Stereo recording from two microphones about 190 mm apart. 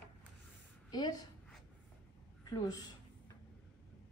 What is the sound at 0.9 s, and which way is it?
Speech, 20° left (ahead or behind).